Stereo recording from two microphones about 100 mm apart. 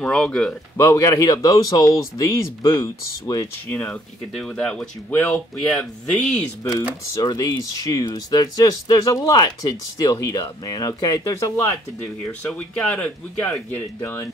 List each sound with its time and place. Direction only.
0.0 s speech: 5° left (ahead or behind)
0.7 s speech: 30° left (ahead or behind)
3.7 s speech: 15° left (ahead or behind)
5.8 s speech: 5° left (ahead or behind)
7.2 s speech: 35° left (ahead or behind)
8.0 s speech: 45° left (ahead or behind); by 11.8 s 30° left (ahead or behind)
12.3 s speech: 10° left (ahead or behind)